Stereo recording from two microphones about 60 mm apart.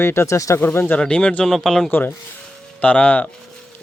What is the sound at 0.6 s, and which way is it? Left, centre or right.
Speech, left.